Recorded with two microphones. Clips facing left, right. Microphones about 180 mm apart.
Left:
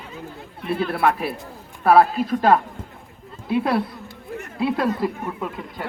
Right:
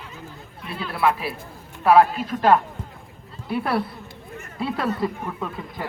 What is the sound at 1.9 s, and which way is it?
Speech, 40° left (ahead or behind).